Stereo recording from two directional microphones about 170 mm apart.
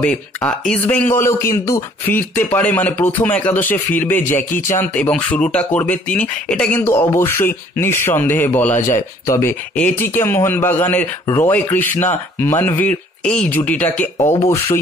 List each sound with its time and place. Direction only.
0.0 s a man's voice: 5° left (ahead or behind)
14.1 s speech: 20° left (ahead or behind)